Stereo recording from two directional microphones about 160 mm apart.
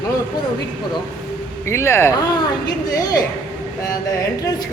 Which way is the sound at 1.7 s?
15° left (ahead or behind).